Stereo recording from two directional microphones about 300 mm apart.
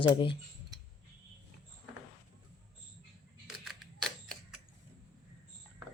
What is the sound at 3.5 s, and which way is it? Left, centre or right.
Camera, centre.